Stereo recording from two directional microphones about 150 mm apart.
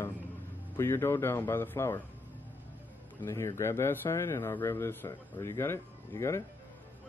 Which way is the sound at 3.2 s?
20° left (ahead or behind).